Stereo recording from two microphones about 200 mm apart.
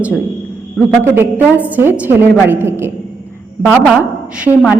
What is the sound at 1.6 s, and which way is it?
A woman's voice, 10° right (ahead or behind).